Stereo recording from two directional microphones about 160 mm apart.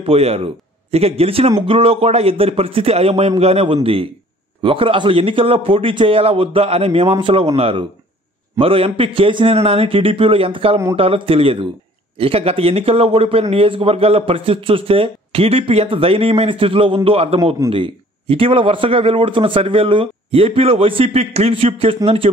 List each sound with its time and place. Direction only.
0.0 s a man's voice: 40° right (ahead or behind)